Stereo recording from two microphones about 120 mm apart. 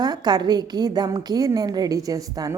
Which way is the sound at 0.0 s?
35° right (ahead or behind).